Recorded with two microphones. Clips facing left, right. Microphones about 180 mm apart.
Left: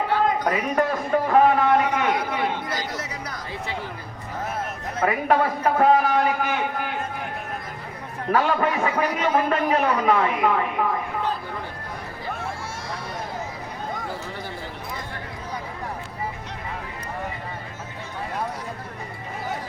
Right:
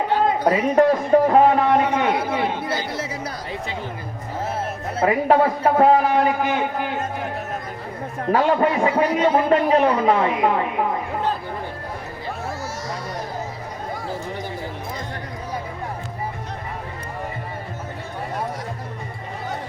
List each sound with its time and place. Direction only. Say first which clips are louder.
0.1 s a man's voice: right 4 dB; 25° right (ahead or behind)
4.9 s a man's voice: right 4 dB; 25° right (ahead or behind)
8.3 s a man's voice: right 3 dB; 30° right (ahead or behind)